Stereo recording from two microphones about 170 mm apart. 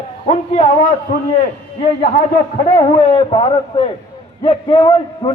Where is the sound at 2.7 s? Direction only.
30° left (ahead or behind).